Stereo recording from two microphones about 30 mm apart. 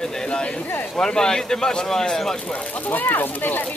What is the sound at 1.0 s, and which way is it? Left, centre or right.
Speech, centre.